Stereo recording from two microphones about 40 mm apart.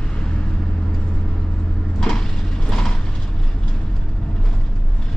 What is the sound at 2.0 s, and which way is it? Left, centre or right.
Vehicle, centre.